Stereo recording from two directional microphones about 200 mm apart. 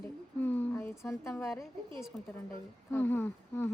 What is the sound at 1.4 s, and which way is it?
Speech, centre (ahead or behind).